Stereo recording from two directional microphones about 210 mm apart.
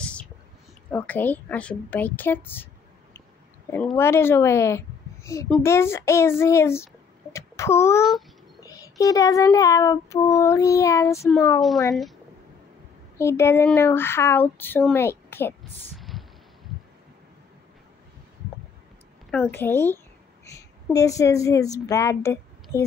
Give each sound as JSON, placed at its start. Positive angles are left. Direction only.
{"t": 0.0, "sound": "a sound", "side_deg": 5}
{"t": 0.9, "sound": "a woman's voice", "side_deg": 10}
{"t": 8.5, "sound": "child singing", "side_deg": 15}
{"t": 10.5, "sound": "speech", "side_deg": 15}
{"t": 13.2, "sound": "speech", "side_deg": 10}
{"t": 16.0, "sound": "a sound", "side_deg": 0}
{"t": 19.3, "sound": "a woman's voice", "side_deg": 10}